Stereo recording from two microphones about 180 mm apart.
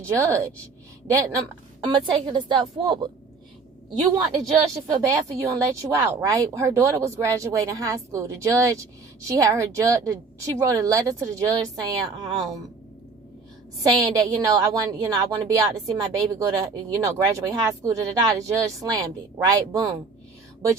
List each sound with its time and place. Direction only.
0.1 s a woman's voice: 15° right (ahead or behind)
4.4 s speech: 20° right (ahead or behind)
13.8 s a woman's voice: 20° right (ahead or behind)